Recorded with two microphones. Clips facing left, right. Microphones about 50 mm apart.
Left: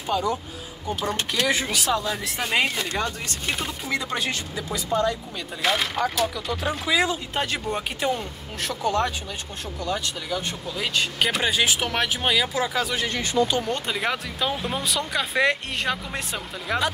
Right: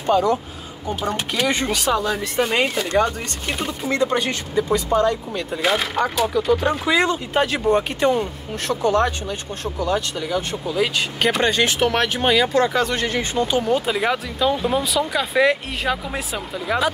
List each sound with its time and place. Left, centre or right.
0.0 s speech: centre
1.1 s speech: centre
1.5 s speech: centre
13.2 s speech: right
13.7 s speech: centre